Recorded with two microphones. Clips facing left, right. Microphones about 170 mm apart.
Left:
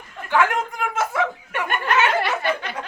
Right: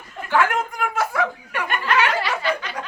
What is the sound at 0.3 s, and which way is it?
Chuckle, 20° left (ahead or behind).